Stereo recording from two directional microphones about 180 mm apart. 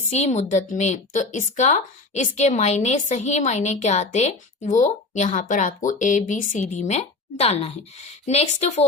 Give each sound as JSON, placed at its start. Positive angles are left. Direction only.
{"t": 0.0, "sound": "a woman's voice", "side_deg": 40}